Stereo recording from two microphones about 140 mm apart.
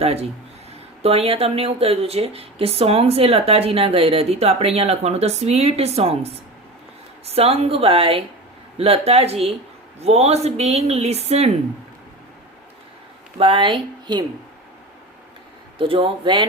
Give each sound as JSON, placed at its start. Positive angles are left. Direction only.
{"t": 0.0, "sound": "speech", "side_deg": -45}
{"t": 7.3, "sound": "speech", "side_deg": -45}
{"t": 13.4, "sound": "speech", "side_deg": -40}
{"t": 15.8, "sound": "speech", "side_deg": -40}